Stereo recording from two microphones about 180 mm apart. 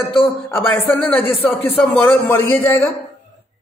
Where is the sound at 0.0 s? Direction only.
10° left (ahead or behind).